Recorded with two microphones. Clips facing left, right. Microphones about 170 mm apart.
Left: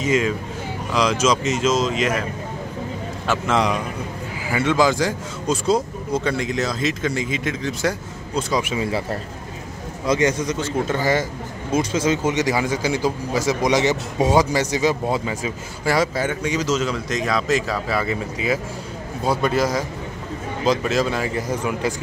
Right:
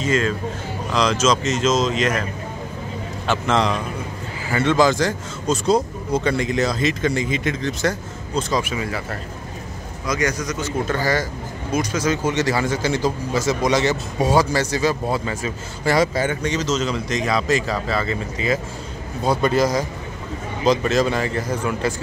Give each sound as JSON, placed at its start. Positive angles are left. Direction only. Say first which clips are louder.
{"t": 0.0, "sound": "speech", "louder": "even", "side_deg": 15}
{"t": 3.3, "sound": "speech", "louder": "even", "side_deg": 10}
{"t": 8.6, "sound": "a man's voice", "louder": "left 3 dB", "side_deg": 25}
{"t": 10.0, "sound": "a man's voice", "louder": "left 4 dB", "side_deg": 25}
{"t": 21.4, "sound": "speech", "louder": "even", "side_deg": 15}